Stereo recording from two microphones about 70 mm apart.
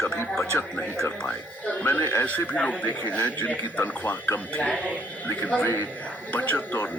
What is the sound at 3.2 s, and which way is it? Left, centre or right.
Speech, left.